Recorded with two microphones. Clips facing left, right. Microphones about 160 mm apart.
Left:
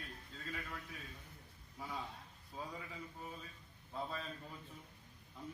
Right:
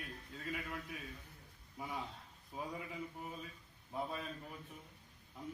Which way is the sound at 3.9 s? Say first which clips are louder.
Right 2 dB; 15° right (ahead or behind).